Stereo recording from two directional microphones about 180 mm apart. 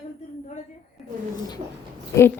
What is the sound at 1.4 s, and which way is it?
Speech, 20° left (ahead or behind).